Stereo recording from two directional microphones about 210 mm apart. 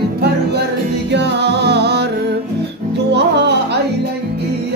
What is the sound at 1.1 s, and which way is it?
Music, 55° right (ahead or behind).